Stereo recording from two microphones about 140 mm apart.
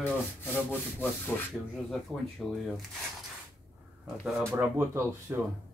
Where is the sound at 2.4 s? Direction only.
Centre (ahead or behind).